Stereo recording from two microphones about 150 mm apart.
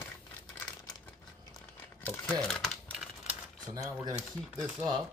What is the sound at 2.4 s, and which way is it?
Crumpling, 5° left (ahead or behind).